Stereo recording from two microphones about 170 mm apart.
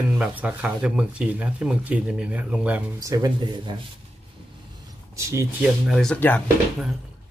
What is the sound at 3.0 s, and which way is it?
Speech, 20° right (ahead or behind).